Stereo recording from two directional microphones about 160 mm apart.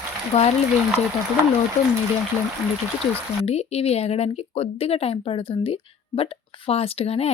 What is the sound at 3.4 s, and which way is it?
Speech, 40° left (ahead or behind).